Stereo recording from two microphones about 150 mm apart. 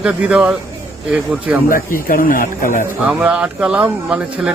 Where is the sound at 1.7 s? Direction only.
70° left (ahead or behind).